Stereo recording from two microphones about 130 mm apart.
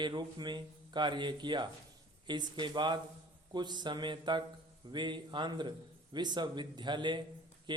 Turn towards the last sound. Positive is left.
turn(degrees=-35)  # may be behind; listen again after turning